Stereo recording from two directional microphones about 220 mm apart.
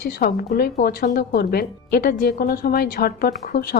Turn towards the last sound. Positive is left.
turn(degrees=45)  # may be behind; listen again after turning